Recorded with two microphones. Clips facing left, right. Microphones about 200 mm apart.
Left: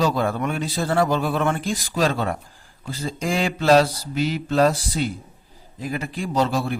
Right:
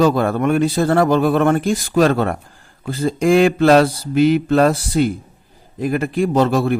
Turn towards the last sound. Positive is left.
turn(degrees=-60)  # may be behind; listen again after turning